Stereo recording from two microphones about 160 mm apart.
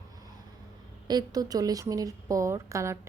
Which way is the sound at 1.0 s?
25° right (ahead or behind).